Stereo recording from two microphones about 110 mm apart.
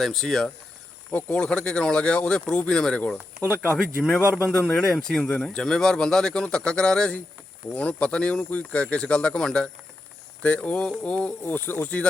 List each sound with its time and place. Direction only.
0.0 s speech: 5° left (ahead or behind)
4.5 s speech: 5° left (ahead or behind)